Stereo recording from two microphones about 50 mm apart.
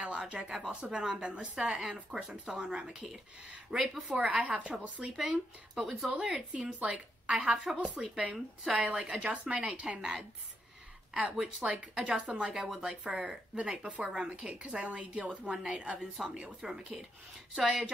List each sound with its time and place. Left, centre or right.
0.0 s a woman's voice: right
5.0 s a woman's voice: centre
7.7 s a woman's voice: right
11.6 s a woman's voice: right